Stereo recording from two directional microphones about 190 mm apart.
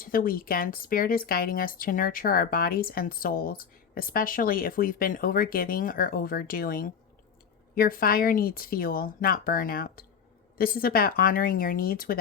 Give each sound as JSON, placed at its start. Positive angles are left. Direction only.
{"t": 0.0, "sound": "speech", "side_deg": 50}